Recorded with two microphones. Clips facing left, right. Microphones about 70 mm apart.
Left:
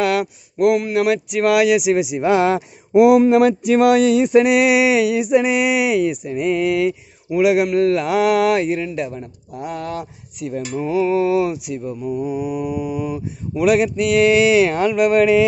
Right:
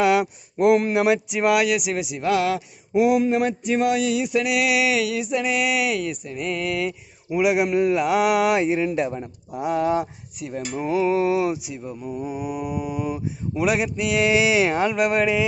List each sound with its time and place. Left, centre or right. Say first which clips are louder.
0.0 s a sound: even; centre
0.6 s speech: left 1 dB; right
0.9 s speech: left 2 dB; centre
1.5 s speech: left 7 dB; centre; by 2.6 s left
2.9 s a sound: left 7 dB; left; by 7.0 s centre
7.3 s a man's voice: left 4 dB; centre
8.8 s mantra: right 1 dB; right
9.5 s mantra: right 5 dB; centre
11.9 s speech: left 6 dB; centre